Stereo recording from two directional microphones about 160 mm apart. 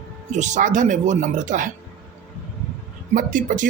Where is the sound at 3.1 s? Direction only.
55° right (ahead or behind).